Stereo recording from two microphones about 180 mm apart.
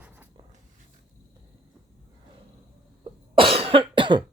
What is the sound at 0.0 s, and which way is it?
Writing, 10° right (ahead or behind).